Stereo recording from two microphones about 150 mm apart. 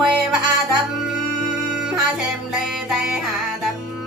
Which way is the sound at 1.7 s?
5° right (ahead or behind).